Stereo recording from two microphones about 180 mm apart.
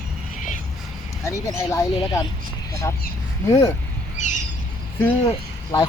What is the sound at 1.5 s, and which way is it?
Speech, 20° left (ahead or behind).